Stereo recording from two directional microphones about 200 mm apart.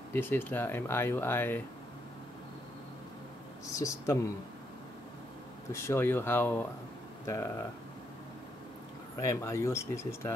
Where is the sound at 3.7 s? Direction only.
15° left (ahead or behind).